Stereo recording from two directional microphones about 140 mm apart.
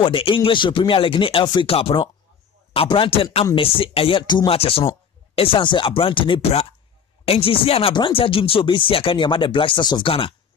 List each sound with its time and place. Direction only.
0.0 s speech: 40° left (ahead or behind)
4.6 s speech: 45° left (ahead or behind)